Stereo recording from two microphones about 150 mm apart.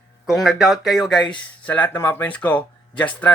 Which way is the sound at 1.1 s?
30° left (ahead or behind).